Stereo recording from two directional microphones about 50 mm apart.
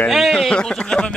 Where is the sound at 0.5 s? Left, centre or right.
Centre.